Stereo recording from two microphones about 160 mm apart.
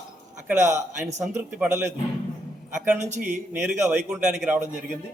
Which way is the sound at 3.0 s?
50° right (ahead or behind).